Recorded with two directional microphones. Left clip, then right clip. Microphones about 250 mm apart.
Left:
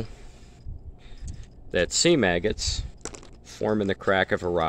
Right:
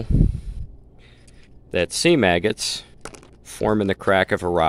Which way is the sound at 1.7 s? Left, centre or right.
Centre.